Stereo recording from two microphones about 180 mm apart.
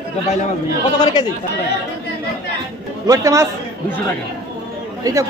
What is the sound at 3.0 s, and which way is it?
Speech, 20° right (ahead or behind).